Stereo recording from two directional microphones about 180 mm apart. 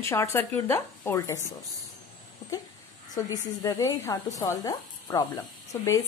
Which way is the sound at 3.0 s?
20° left (ahead or behind).